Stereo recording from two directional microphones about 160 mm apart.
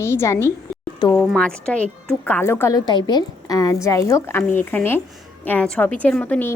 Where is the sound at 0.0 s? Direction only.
15° left (ahead or behind).